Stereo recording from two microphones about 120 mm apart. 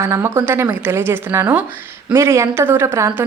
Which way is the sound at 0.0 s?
20° right (ahead or behind).